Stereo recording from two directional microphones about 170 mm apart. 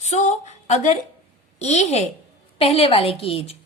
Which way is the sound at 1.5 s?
40° left (ahead or behind).